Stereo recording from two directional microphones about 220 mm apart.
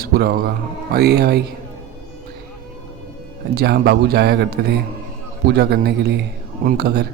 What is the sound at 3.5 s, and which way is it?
Speech, 45° right (ahead or behind).